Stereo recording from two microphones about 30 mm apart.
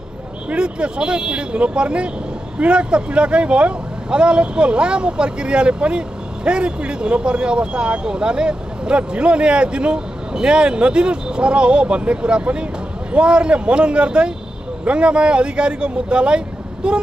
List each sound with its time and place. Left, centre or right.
0.6 s speech: right